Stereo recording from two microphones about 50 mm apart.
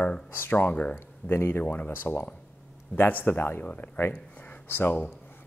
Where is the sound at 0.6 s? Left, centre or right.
Left.